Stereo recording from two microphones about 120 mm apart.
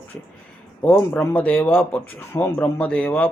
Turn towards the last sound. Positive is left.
turn(degrees=15)  # may be behind; listen again after turning